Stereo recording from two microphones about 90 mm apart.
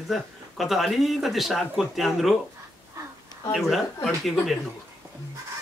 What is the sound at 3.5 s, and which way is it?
Speech, centre (ahead or behind).